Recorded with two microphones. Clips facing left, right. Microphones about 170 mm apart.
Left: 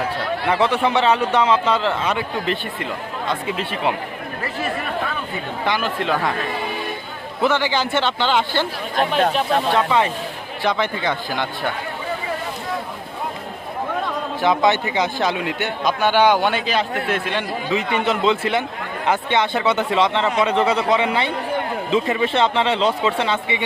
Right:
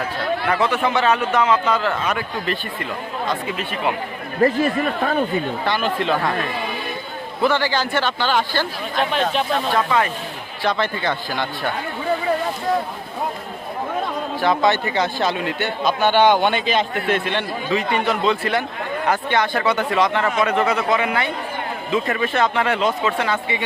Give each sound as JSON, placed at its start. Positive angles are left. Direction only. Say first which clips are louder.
{"t": 0.6, "sound": "a man's voice", "louder": "left 3 dB", "side_deg": 30}
{"t": 4.4, "sound": "speech", "louder": "right 9 dB", "side_deg": -40}
{"t": 5.8, "sound": "speech", "louder": "right 2 dB", "side_deg": 5}
{"t": 7.4, "sound": "a man's voice", "louder": "even", "side_deg": 20}
{"t": 9.7, "sound": "a man's voice", "louder": "left 1 dB", "side_deg": 20}
{"t": 14.4, "sound": "a man's voice", "louder": "left 1 dB", "side_deg": 20}